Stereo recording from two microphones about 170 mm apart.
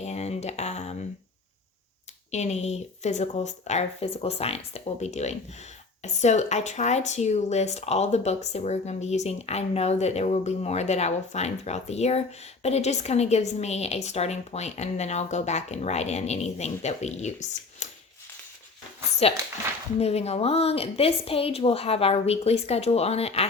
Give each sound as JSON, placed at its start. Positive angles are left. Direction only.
{"t": 0.0, "sound": "a sound", "side_deg": 40}
{"t": 2.3, "sound": "speech", "side_deg": 40}
{"t": 20.0, "sound": "speech", "side_deg": 40}